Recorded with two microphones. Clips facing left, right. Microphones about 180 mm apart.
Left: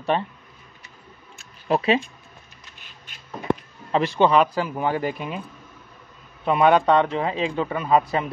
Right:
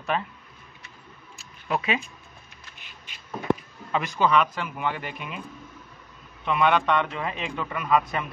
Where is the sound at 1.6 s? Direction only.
35° left (ahead or behind).